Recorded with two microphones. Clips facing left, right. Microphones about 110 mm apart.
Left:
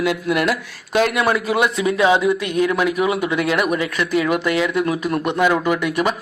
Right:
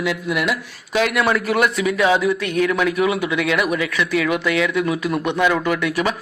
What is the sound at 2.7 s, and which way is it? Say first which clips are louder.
Speech: even; 5° left (ahead or behind).